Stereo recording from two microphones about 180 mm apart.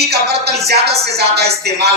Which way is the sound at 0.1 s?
65° right (ahead or behind).